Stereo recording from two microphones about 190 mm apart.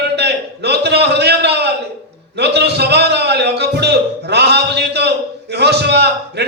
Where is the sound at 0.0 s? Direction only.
60° right (ahead or behind).